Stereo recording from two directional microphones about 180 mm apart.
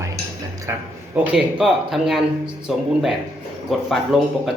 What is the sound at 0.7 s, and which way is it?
Speech, 15° right (ahead or behind).